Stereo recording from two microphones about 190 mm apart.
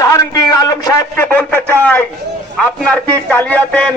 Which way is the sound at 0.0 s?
15° left (ahead or behind).